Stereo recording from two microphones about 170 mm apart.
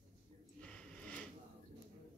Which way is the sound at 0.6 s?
5° left (ahead or behind).